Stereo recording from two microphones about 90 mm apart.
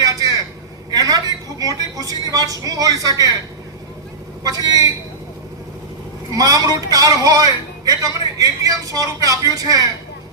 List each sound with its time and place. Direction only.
0.0 s vehicle: 40° right (ahead or behind)
0.9 s a woman's voice: 45° right (ahead or behind)
4.4 s a man's voice: 45° right (ahead or behind)
6.3 s a man's voice: 45° right (ahead or behind)